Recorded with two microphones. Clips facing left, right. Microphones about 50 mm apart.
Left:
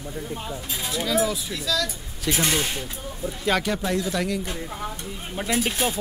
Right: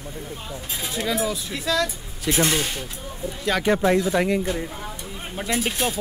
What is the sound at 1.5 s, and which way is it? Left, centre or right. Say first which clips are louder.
Speech: right 3 dB; right.